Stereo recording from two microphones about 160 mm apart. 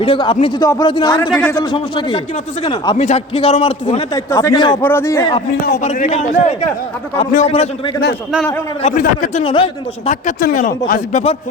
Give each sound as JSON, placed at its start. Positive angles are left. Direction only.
{"t": 0.0, "sound": "a man's voice", "side_deg": 35}
{"t": 0.6, "sound": "speech", "side_deg": 25}
{"t": 1.3, "sound": "a man's voice", "side_deg": 10}
{"t": 1.5, "sound": "a man's voice", "side_deg": 30}
{"t": 3.0, "sound": "a man's voice", "side_deg": 40}
{"t": 4.1, "sound": "speech", "side_deg": 20}
{"t": 4.8, "sound": "a man's voice", "side_deg": 15}
{"t": 5.5, "sound": "a man's voice", "side_deg": 85}
{"t": 5.8, "sound": "a man's voice", "side_deg": 45}
{"t": 8.8, "sound": "a man's voice", "side_deg": 45}
{"t": 9.3, "sound": "a man's voice", "side_deg": 30}
{"t": 10.1, "sound": "speech", "side_deg": 50}
{"t": 11.1, "sound": "a man's voice", "side_deg": 40}